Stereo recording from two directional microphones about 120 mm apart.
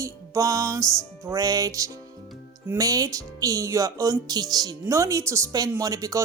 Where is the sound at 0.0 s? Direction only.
30° right (ahead or behind).